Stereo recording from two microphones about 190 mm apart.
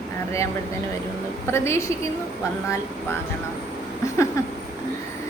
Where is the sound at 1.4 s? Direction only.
15° left (ahead or behind).